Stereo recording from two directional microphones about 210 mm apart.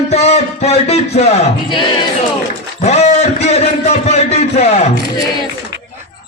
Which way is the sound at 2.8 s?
30° left (ahead or behind).